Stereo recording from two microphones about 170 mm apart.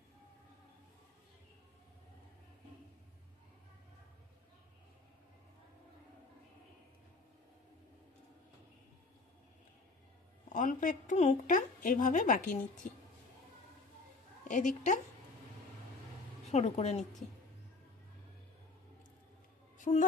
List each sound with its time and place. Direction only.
10.5 s a woman's voice: 50° left (ahead or behind)
14.5 s a woman's voice: 45° left (ahead or behind)
16.4 s a woman's voice: 40° left (ahead or behind)
19.8 s a woman's voice: 50° left (ahead or behind)